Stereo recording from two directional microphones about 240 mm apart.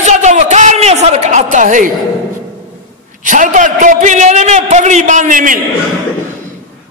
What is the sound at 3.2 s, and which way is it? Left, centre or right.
A man's voice, right.